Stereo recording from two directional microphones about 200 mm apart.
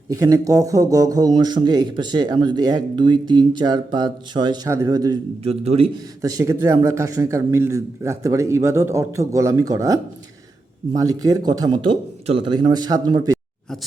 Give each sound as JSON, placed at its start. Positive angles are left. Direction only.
{"t": 0.1, "sound": "speech", "side_deg": -15}
{"t": 5.4, "sound": "speech", "side_deg": -30}
{"t": 6.2, "sound": "a man's voice", "side_deg": -15}